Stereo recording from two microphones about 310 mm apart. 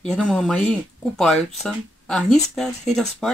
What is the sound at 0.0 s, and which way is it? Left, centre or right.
Speech, centre.